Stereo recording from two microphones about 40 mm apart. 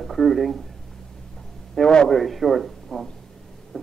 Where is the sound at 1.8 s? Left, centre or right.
Centre.